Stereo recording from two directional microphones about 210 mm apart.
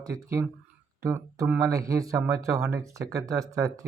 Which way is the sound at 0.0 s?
15° right (ahead or behind).